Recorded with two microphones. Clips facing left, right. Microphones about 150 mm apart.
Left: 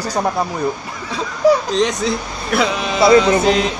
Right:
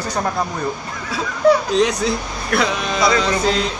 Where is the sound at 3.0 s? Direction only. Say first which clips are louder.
Left 7 dB; 25° left (ahead or behind).